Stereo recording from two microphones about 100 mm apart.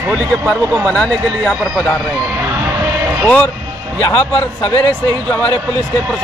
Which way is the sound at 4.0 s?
40° left (ahead or behind).